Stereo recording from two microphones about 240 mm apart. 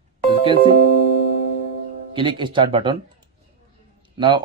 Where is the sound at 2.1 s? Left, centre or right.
Right.